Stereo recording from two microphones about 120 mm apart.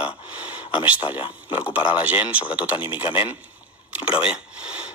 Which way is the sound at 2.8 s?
45° left (ahead or behind).